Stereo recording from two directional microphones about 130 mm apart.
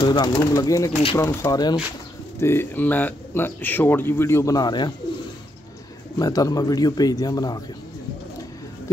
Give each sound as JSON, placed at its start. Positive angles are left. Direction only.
{"t": 0.0, "sound": "speech", "side_deg": 35}
{"t": 2.4, "sound": "speech", "side_deg": 15}
{"t": 6.1, "sound": "speech", "side_deg": 30}